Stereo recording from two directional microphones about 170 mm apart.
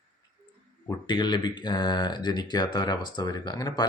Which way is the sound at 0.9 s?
25° left (ahead or behind).